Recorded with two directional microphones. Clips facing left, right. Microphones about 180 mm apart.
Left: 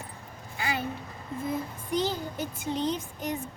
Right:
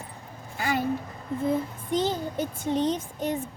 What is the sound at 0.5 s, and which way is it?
Speech, 40° right (ahead or behind).